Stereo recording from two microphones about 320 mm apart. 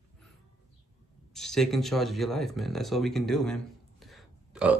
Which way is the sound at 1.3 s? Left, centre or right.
Centre.